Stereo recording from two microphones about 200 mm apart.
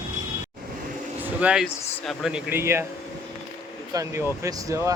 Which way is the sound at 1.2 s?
5° right (ahead or behind).